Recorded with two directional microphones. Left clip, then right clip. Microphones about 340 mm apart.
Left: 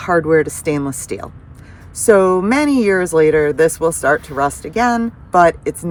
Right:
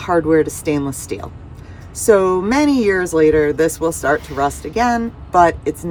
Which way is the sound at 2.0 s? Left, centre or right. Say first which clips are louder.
Left 2 dB; left.